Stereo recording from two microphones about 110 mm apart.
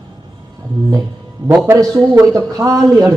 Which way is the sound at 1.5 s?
30° right (ahead or behind).